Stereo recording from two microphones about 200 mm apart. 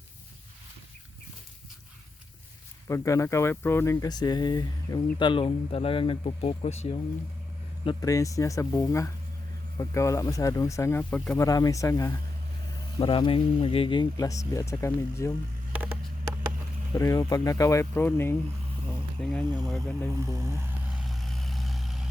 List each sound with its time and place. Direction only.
2.8 s speech: 15° left (ahead or behind); by 7.0 s 30° left (ahead or behind)
7.9 s speech: 15° left (ahead or behind)
13.0 s speech: 25° left (ahead or behind)
15.7 s a sound: 5° right (ahead or behind)
17.0 s speech: 15° left (ahead or behind)
20.1 s speech: 15° right (ahead or behind)
21.1 s vehicle: centre (ahead or behind)